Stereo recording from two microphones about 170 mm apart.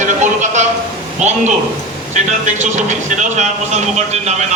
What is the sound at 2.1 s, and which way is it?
Speech, 45° right (ahead or behind).